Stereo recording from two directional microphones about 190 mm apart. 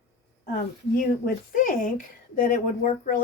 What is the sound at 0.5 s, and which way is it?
Speech, 50° left (ahead or behind).